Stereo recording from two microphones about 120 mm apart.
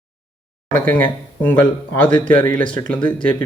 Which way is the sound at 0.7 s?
15° left (ahead or behind).